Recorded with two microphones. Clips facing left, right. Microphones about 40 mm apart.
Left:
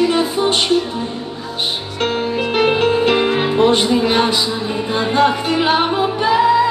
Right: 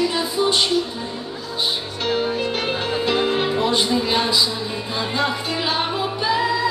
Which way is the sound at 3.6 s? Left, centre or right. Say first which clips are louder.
Left 6 dB; left.